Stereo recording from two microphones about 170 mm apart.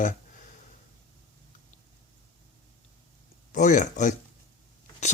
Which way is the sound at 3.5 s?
45° left (ahead or behind).